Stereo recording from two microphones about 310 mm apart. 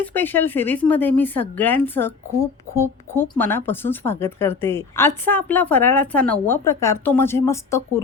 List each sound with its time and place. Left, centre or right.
0.0 s speech: centre